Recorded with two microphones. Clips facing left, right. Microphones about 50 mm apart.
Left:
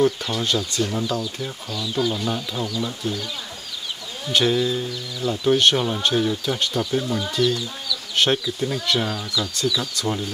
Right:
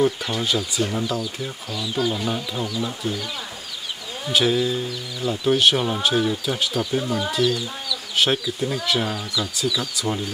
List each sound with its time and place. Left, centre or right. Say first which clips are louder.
0.0 s speech: left 1 dB; centre
4.3 s speech: even; centre